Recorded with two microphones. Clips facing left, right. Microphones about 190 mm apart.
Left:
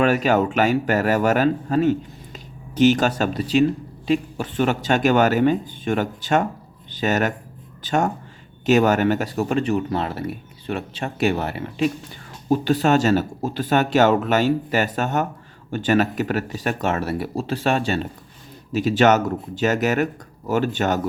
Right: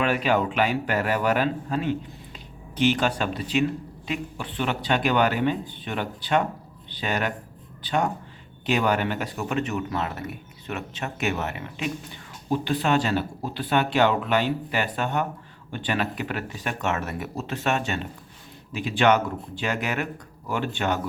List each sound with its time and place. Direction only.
0.0 s a man's voice: 45° left (ahead or behind)